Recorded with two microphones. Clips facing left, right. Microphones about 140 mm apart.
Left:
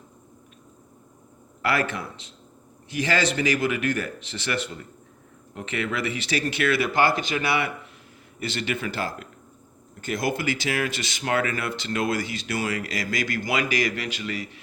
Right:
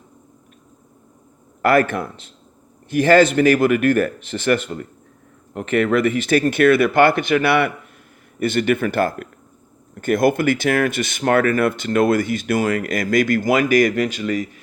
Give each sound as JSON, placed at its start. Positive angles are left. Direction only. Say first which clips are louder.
{"t": 1.6, "sound": "speech", "louder": "right 9 dB", "side_deg": -50}